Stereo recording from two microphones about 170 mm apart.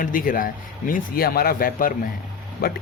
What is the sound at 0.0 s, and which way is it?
Speech, 55° left (ahead or behind).